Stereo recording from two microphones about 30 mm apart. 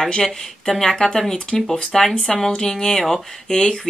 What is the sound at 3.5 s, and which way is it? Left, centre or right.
Speech, left.